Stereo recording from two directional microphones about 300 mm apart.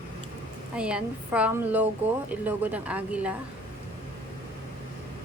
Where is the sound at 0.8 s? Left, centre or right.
Centre.